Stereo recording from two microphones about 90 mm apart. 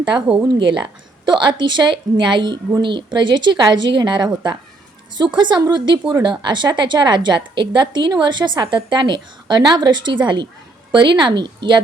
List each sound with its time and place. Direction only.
0.4 s a woman's voice: 65° right (ahead or behind)